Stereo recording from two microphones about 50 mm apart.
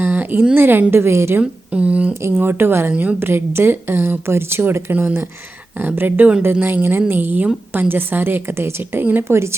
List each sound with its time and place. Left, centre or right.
0.0 s a sound: right
0.5 s speech: right
1.4 s speech: right
2.3 s speech: right
9.2 s a woman's voice: right